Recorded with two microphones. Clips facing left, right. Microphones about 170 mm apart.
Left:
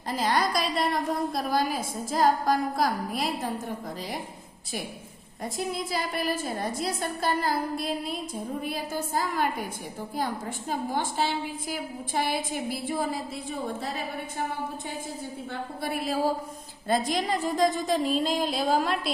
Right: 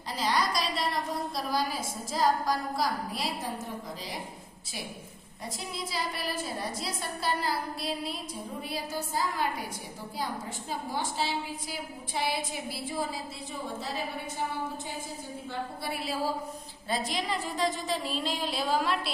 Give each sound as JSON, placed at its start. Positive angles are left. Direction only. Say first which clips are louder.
{"t": 0.1, "sound": "a woman's voice", "louder": "left 3 dB", "side_deg": 50}
{"t": 5.5, "sound": "a woman's voice", "louder": "left 6 dB", "side_deg": 50}
{"t": 10.7, "sound": "a woman's voice", "louder": "left 5 dB", "side_deg": 50}
{"t": 15.8, "sound": "a woman's voice", "louder": "left 7 dB", "side_deg": 50}